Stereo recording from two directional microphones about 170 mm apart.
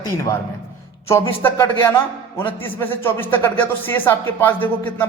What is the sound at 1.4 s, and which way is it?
Speech, 10° left (ahead or behind).